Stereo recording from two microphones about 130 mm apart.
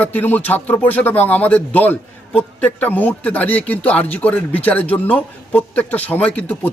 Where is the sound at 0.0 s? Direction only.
15° left (ahead or behind).